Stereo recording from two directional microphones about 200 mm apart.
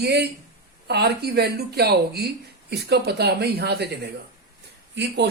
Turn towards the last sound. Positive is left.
turn(degrees=-60)  # may be behind; listen again after turning